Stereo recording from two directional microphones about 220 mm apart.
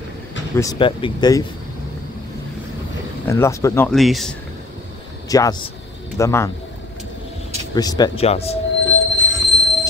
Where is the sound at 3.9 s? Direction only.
Centre (ahead or behind).